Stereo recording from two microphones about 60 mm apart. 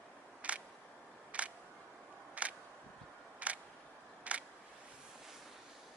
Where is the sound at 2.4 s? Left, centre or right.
Right.